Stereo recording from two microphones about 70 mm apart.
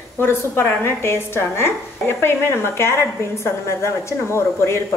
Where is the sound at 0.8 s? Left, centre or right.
Left.